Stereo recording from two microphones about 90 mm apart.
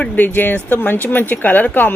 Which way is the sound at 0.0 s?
20° left (ahead or behind).